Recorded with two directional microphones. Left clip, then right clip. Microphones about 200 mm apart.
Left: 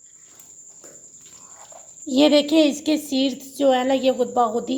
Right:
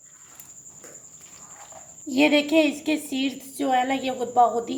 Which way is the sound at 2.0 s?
35° left (ahead or behind).